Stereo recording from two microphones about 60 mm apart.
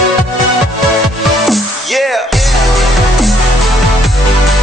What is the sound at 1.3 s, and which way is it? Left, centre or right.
Music, centre.